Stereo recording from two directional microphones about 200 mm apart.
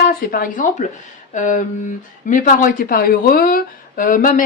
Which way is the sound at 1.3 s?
40° left (ahead or behind).